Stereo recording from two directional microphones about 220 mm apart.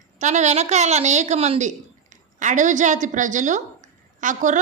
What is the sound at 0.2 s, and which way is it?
A woman's voice, 30° right (ahead or behind).